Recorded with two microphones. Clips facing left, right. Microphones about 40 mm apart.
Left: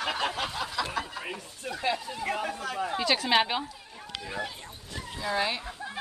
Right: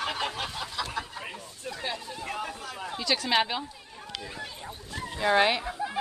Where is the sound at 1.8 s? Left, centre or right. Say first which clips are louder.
Left 6 dB; left.